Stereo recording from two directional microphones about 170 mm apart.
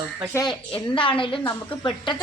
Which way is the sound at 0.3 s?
25° left (ahead or behind).